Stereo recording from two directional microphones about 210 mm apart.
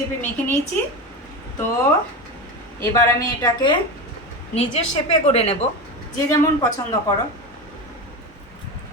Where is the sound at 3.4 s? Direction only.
20° left (ahead or behind).